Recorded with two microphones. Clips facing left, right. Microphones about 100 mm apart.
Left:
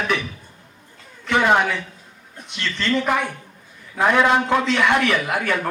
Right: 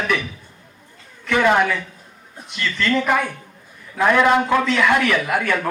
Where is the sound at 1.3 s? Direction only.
45° right (ahead or behind).